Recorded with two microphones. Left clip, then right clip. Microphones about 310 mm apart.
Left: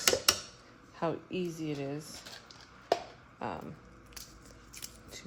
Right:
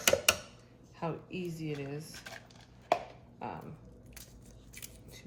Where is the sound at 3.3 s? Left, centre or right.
Left.